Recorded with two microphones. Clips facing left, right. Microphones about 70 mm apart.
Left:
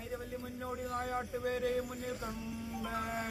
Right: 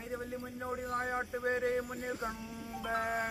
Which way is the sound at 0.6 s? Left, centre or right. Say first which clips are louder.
Right 2 dB; right.